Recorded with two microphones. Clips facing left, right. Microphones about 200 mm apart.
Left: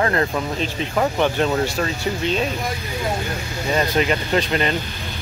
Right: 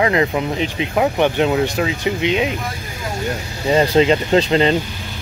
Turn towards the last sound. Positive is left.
turn(degrees=-25)  # may be behind; listen again after turning